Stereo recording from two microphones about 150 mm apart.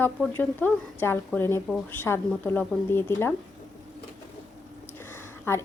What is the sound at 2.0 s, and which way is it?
A woman's voice, 15° left (ahead or behind).